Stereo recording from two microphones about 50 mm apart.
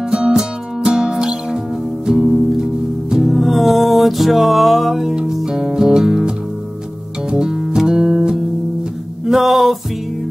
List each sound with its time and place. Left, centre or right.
0.1 s music: centre
3.3 s music: centre